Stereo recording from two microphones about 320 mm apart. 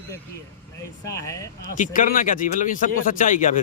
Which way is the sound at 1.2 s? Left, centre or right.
Centre.